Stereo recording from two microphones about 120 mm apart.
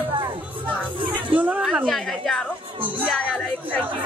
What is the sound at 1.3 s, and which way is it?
Speech, 15° right (ahead or behind).